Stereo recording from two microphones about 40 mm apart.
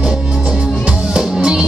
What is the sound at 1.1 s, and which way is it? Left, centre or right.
Music, right.